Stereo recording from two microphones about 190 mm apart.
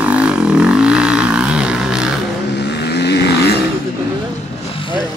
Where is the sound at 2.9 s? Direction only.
60° left (ahead or behind).